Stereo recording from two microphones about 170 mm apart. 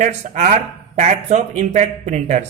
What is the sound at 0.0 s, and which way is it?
Speech, 45° right (ahead or behind).